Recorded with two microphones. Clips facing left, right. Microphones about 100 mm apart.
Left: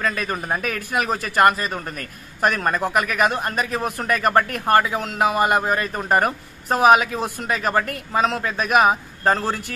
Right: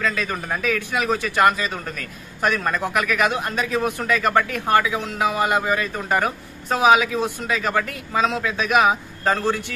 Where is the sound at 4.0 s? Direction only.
55° left (ahead or behind).